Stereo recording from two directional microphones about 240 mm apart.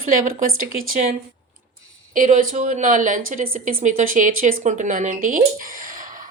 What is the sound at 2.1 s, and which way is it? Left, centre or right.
Speech, right.